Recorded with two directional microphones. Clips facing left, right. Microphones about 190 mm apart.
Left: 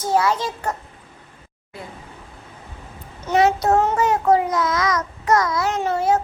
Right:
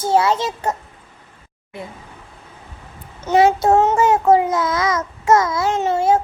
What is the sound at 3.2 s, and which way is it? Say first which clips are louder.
Child singing: right 3 dB; 25° right (ahead or behind).